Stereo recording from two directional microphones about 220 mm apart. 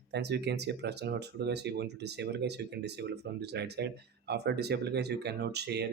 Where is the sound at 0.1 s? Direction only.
50° right (ahead or behind).